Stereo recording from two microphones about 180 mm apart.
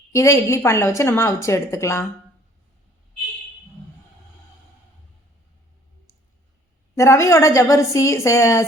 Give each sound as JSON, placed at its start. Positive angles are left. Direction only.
{"t": 0.1, "sound": "a woman's voice", "side_deg": 15}
{"t": 6.9, "sound": "a woman's voice", "side_deg": 15}